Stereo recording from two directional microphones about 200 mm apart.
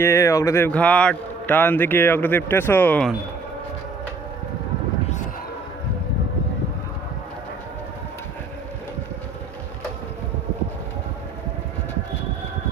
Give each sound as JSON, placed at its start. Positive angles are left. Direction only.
{"t": 0.0, "sound": "a man's voice", "side_deg": 15}